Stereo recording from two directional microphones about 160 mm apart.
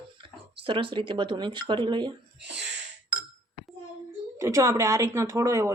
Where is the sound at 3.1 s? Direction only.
10° right (ahead or behind).